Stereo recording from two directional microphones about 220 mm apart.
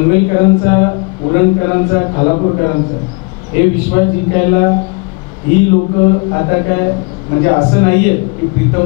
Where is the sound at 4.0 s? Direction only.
15° left (ahead or behind).